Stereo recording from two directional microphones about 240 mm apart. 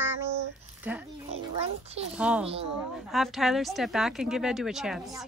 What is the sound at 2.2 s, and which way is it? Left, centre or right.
A woman's voice, centre.